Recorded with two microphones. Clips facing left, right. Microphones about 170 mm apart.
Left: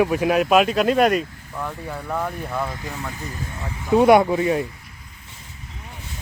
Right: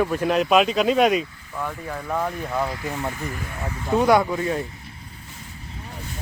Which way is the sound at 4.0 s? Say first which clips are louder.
Left 4 dB; 25° left (ahead or behind).